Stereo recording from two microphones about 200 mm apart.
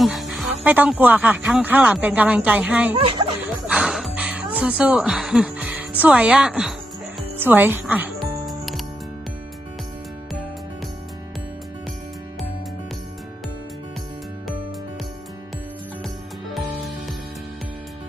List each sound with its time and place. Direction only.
0.0 s speech: centre (ahead or behind)
2.9 s speech: 25° right (ahead or behind)
3.7 s music: 5° right (ahead or behind)